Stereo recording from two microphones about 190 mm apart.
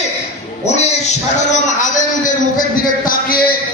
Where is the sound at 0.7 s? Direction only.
35° left (ahead or behind).